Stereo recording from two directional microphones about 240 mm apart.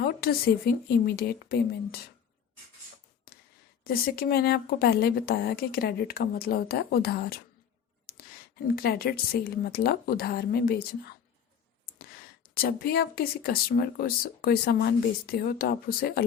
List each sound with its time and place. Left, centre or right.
0.0 s speech: left
3.3 s a sound: left
3.8 s speech: left
8.6 s speech: left
12.5 s speech: left